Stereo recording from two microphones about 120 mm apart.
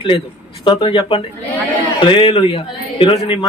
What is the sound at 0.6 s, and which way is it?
A man's voice, 40° left (ahead or behind).